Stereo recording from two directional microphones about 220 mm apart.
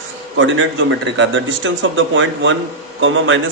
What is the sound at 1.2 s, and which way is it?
A man's voice, 60° right (ahead or behind).